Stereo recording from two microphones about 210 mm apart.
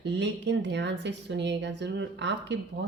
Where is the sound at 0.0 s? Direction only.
55° right (ahead or behind).